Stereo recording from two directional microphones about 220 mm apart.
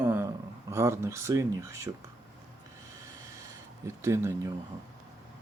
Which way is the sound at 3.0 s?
15° right (ahead or behind).